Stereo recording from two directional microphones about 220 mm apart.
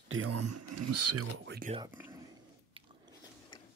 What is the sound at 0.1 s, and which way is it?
Speech, 80° right.